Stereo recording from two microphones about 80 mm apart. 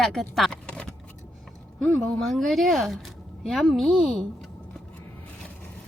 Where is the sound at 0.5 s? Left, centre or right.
Centre.